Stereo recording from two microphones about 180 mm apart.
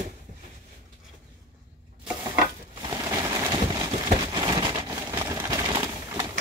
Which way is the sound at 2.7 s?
20° right (ahead or behind).